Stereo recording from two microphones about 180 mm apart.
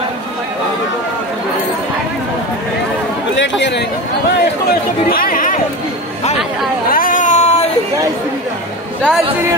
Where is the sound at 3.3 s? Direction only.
85° left.